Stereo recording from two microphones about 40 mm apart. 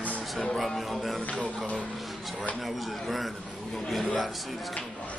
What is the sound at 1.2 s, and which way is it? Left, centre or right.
Speech, left.